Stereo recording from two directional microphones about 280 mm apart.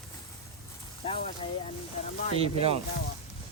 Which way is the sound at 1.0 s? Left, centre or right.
Centre.